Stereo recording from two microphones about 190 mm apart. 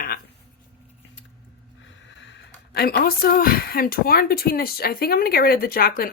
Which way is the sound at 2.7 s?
55° left (ahead or behind).